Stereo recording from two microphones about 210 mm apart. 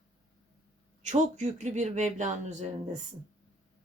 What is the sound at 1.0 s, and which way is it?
Speech, 35° right (ahead or behind).